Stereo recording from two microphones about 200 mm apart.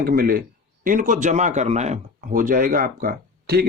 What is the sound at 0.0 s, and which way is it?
Speech, 45° right (ahead or behind).